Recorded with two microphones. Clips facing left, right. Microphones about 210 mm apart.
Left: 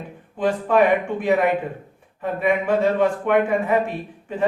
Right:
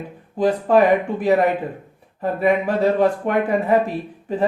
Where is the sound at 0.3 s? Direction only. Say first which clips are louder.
Right 3 dB; 35° right (ahead or behind).